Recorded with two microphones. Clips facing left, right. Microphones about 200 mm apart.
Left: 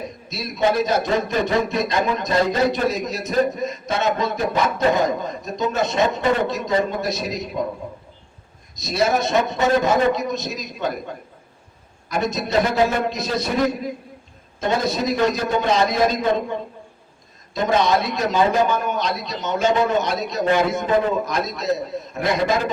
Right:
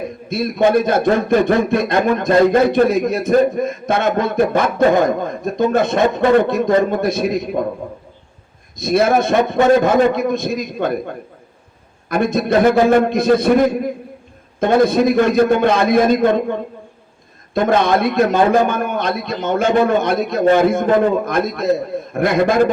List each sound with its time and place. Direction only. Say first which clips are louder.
0.0 s a man's voice: right 9 dB; 55° right (ahead or behind)
8.7 s a man's voice: right 6 dB; 55° right (ahead or behind)